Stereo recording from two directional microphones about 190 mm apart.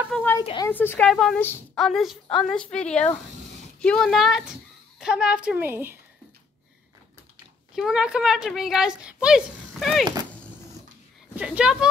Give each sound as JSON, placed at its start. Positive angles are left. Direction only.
{"t": 0.1, "sound": "a sound", "side_deg": 10}
{"t": 0.4, "sound": "a sound", "side_deg": 30}
{"t": 0.7, "sound": "a woman's voice", "side_deg": 10}
{"t": 1.9, "sound": "a woman's voice", "side_deg": 0}
{"t": 7.7, "sound": "a woman's voice", "side_deg": -5}
{"t": 11.3, "sound": "a woman's voice", "side_deg": -5}